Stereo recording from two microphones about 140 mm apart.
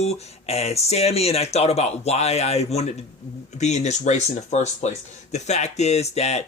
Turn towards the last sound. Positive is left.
turn(degrees=50)  # may be behind; listen again after turning